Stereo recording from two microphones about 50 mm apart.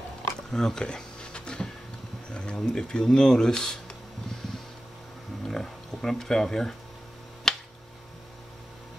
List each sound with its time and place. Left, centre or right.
0.5 s a sound: centre
2.3 s speech: centre
5.5 s speech: centre
7.5 s finger snapping: centre